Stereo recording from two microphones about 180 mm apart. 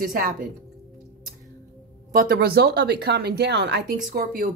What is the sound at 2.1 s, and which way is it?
Speech, 50° right (ahead or behind).